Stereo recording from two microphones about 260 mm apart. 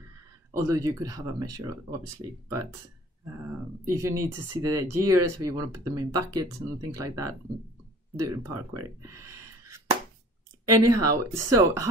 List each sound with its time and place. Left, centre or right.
0.5 s speech: centre
3.9 s speech: centre
10.6 s speech: right
11.1 s speech: centre